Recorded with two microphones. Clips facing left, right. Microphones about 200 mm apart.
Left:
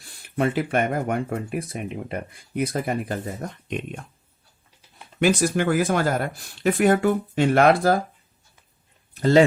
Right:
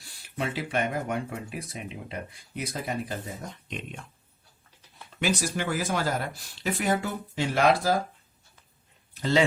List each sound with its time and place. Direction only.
0.3 s speech: 55° left (ahead or behind)
5.2 s speech: 55° left (ahead or behind)
9.1 s speech: 50° left (ahead or behind)